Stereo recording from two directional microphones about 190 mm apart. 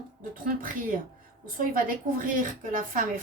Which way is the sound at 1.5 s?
45° right (ahead or behind).